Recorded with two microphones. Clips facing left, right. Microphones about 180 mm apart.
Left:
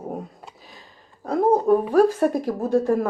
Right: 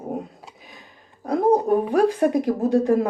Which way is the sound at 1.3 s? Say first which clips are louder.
Even; 15° right (ahead or behind).